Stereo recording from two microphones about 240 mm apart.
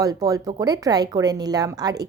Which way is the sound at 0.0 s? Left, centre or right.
Centre.